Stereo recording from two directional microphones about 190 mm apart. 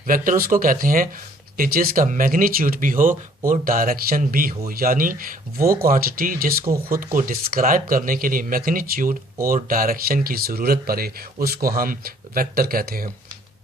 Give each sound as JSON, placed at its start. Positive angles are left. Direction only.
{"t": 0.1, "sound": "speech", "side_deg": -45}